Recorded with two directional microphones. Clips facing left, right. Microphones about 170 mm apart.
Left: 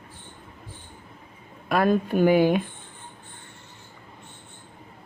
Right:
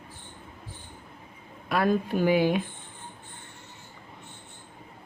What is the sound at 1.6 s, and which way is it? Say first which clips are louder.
Speech: left 3 dB; 55° left (ahead or behind).